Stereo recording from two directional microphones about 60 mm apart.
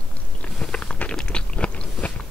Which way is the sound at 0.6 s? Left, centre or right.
Centre.